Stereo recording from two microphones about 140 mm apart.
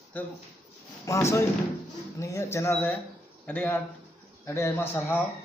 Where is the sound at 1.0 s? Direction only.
20° left (ahead or behind).